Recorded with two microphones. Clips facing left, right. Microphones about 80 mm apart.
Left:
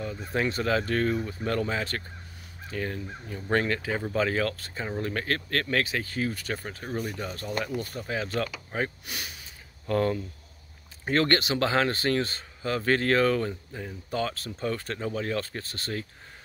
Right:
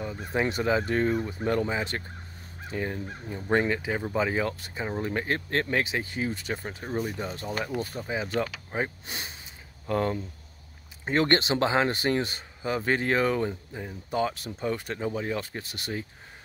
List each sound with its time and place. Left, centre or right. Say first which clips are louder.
0.0 s speech: right 1 dB; centre